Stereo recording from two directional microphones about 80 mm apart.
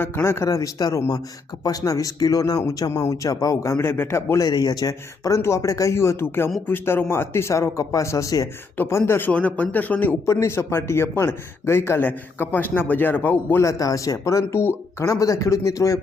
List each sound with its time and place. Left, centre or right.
0.0 s speech: left
0.5 s speech: left
4.4 s speech: left
8.9 s a man's voice: left
10.2 s a man's voice: left
13.6 s speech: left